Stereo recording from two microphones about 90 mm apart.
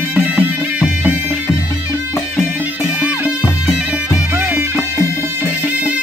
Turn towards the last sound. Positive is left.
turn(degrees=-20)  # may be behind; listen again after turning